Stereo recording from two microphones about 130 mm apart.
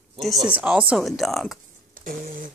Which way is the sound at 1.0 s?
Centre (ahead or behind).